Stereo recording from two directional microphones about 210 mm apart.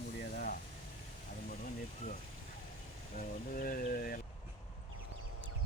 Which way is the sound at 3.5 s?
40° left (ahead or behind).